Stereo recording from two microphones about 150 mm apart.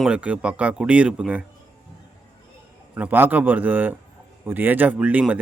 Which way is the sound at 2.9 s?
10° right (ahead or behind).